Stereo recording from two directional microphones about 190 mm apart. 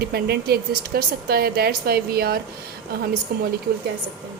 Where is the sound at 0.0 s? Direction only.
55° right (ahead or behind).